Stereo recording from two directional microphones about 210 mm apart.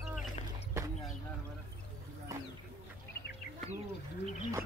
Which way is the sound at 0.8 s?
15° right (ahead or behind).